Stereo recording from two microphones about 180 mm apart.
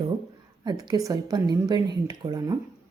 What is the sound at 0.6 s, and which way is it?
Speech, 25° right (ahead or behind).